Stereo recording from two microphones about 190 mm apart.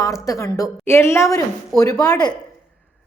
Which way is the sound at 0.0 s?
15° left (ahead or behind).